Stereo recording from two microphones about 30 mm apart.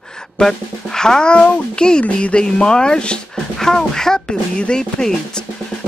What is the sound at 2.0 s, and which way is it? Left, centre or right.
Speech, left.